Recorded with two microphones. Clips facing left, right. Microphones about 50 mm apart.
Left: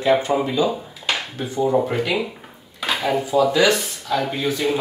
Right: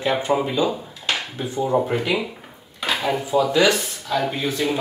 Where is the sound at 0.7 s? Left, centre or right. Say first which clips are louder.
Left 1 dB; centre.